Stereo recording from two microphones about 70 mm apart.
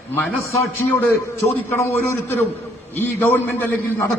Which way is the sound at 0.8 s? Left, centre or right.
Left.